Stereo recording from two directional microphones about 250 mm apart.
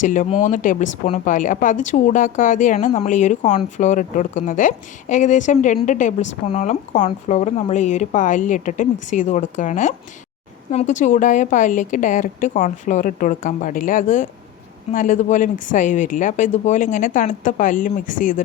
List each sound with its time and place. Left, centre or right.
0.0 s speech: left